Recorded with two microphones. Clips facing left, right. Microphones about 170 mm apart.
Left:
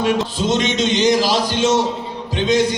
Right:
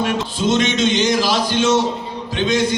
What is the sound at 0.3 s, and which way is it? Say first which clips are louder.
A man's voice: right 1 dB; 35° left (ahead or behind).